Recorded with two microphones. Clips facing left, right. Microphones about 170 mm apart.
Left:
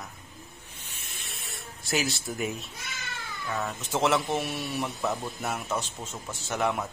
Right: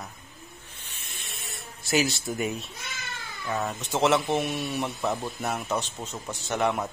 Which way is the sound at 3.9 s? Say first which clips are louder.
Right 2 dB; centre (ahead or behind).